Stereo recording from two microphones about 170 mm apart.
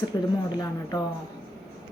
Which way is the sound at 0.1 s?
20° left (ahead or behind).